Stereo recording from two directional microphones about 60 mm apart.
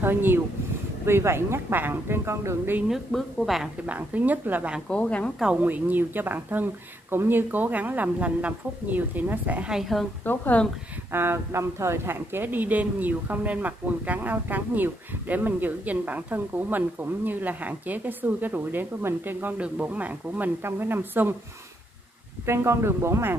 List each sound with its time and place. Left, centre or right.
0.0 s speech: right
2.9 s a woman's voice: centre
3.8 s a woman's voice: right
4.8 s speech: centre
5.6 s a woman's voice: right
9.9 s a woman's voice: centre
10.2 s speech: left
11.1 s speech: right
19.5 s speech: right
22.5 s speech: right